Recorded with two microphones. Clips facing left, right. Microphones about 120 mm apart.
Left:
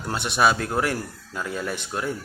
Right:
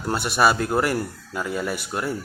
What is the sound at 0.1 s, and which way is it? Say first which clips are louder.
Speech: right 1 dB; 5° right (ahead or behind).